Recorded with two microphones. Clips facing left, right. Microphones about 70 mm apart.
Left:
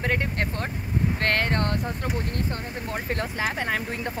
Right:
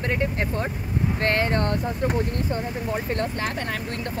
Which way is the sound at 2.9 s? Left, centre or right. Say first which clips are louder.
Right 2 dB; centre.